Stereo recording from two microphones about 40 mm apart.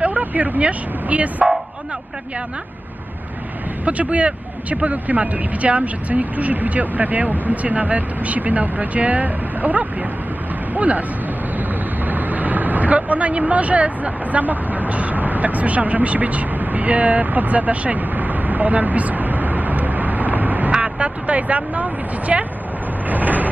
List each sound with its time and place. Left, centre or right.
0.0 s speech: right
3.8 s speech: right
12.0 s vehicle: right
20.7 s speech: right
23.0 s vehicle: right